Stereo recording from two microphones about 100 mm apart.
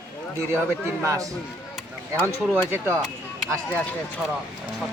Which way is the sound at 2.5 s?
20° right (ahead or behind).